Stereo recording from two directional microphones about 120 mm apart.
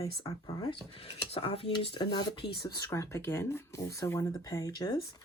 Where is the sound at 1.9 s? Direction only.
40° left (ahead or behind).